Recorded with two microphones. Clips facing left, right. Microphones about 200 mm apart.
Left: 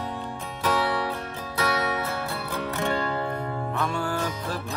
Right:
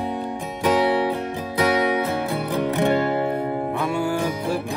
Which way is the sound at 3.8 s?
10° right (ahead or behind).